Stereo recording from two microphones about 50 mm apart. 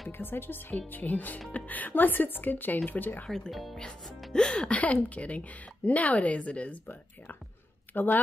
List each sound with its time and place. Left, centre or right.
0.2 s speech: left
3.3 s speech: centre
4.3 s speech: centre
7.9 s speech: left